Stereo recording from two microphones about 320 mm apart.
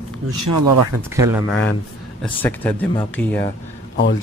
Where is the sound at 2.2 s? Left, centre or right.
Centre.